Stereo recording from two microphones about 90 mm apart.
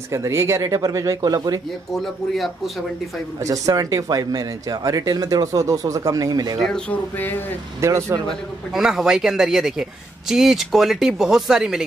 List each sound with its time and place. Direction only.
0.1 s speech: 30° right (ahead or behind); by 1.6 s 50° right (ahead or behind)
2.0 s speech: centre (ahead or behind)
3.4 s speech: 40° right (ahead or behind)
6.9 s speech: 20° left (ahead or behind)
7.8 s speech: 35° right (ahead or behind)
8.7 s speech: 5° right (ahead or behind)